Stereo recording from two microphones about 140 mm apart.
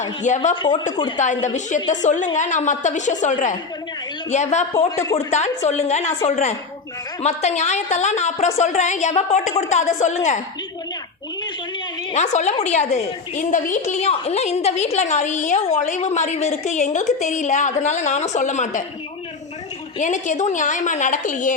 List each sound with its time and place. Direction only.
0.0 s a woman's voice: 60° left (ahead or behind)
0.5 s speech: 35° left (ahead or behind)
1.5 s a woman's voice: 60° left (ahead or behind)
12.1 s a woman's voice: 55° left (ahead or behind)
20.0 s a woman's voice: 60° left (ahead or behind)